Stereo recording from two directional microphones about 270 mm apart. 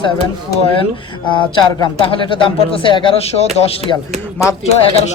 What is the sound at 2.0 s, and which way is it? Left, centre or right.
Speech, centre.